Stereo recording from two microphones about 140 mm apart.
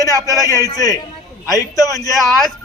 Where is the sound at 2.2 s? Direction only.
Centre (ahead or behind).